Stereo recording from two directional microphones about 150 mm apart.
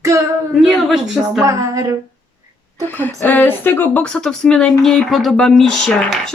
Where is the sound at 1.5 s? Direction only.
20° right (ahead or behind).